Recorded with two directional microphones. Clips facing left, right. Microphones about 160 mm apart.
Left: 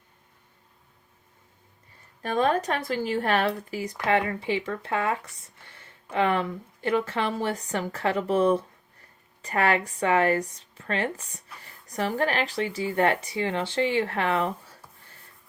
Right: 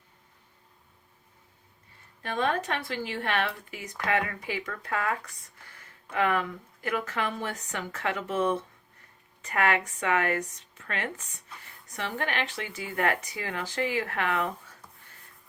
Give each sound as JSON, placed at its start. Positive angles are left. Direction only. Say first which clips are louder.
{"t": 2.2, "sound": "speech", "louder": "left 5 dB", "side_deg": 40}